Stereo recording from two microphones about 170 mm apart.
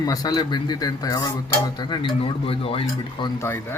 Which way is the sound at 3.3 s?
15° left (ahead or behind).